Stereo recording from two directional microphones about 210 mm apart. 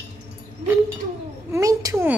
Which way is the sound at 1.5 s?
15° right (ahead or behind).